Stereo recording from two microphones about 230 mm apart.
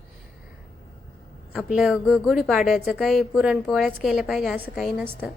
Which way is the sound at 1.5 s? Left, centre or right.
Centre.